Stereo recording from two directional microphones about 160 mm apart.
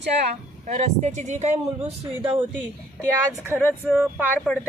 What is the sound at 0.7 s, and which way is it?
Speech, 50° right (ahead or behind).